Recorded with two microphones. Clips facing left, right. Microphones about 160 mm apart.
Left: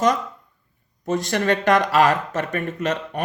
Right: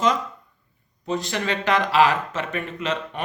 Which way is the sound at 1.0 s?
45° left (ahead or behind).